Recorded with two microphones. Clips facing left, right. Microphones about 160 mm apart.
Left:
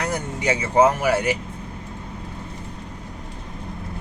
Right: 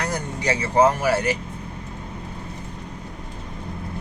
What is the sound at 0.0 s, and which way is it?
Speech, 20° left (ahead or behind).